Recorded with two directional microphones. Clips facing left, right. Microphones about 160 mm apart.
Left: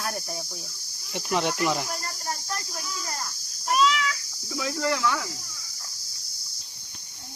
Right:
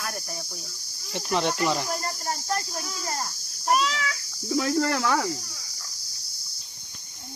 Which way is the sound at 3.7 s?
45° right (ahead or behind).